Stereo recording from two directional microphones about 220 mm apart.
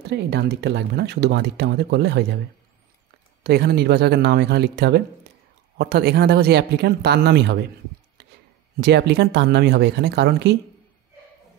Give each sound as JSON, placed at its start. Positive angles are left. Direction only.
{"t": 0.1, "sound": "speech", "side_deg": -50}
{"t": 3.4, "sound": "speech", "side_deg": -50}
{"t": 8.8, "sound": "speech", "side_deg": -50}